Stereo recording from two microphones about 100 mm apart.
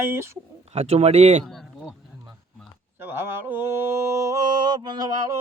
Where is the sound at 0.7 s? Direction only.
90° right.